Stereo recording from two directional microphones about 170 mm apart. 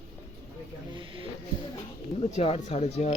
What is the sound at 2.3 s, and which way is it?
Speech, 35° left (ahead or behind).